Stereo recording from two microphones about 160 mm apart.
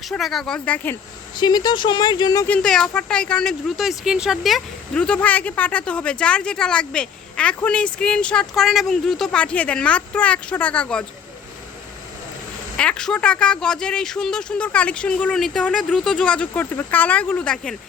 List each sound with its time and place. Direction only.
0.1 s speech: centre (ahead or behind)
1.4 s speech: 25° left (ahead or behind)
2.5 s speech: 5° left (ahead or behind)
12.7 s speech: 5° left (ahead or behind)